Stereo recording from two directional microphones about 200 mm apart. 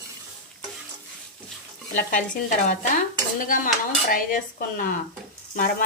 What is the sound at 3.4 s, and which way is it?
Speech, 40° left (ahead or behind).